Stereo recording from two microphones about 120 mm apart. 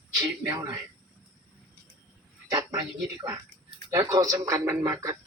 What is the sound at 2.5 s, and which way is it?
Speech, 30° right (ahead or behind).